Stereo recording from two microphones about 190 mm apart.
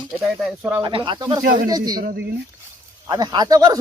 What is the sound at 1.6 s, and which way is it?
Speech, 20° right (ahead or behind).